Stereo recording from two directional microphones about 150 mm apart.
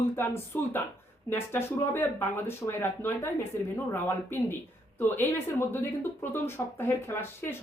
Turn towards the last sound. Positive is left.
turn(degrees=15)  # may be behind; listen again after turning